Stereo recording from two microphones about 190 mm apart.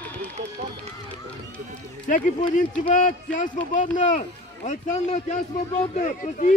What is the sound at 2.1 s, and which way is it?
A man's voice, 40° left (ahead or behind).